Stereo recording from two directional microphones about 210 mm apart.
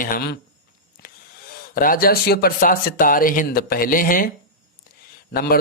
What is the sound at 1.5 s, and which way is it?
Speech, 45° left (ahead or behind).